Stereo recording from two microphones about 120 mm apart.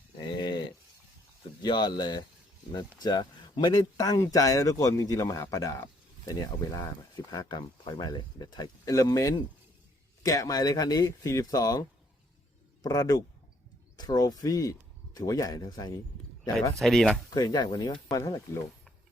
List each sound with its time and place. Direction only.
0.2 s a sound: 35° left (ahead or behind)
1.6 s speech: 40° left (ahead or behind)
7.3 s speech: 35° left (ahead or behind)
16.7 s speech: 5° left (ahead or behind)
17.3 s speech: 35° left (ahead or behind)